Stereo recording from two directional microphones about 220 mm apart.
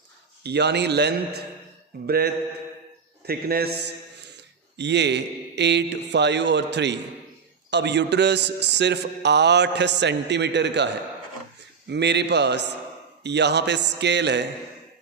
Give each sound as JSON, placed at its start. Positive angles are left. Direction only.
{"t": 0.4, "sound": "a man's voice", "side_deg": -50}
{"t": 11.9, "sound": "a man's voice", "side_deg": -50}